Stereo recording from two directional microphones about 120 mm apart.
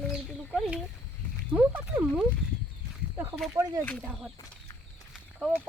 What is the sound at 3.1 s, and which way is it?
Speech, 20° right (ahead or behind).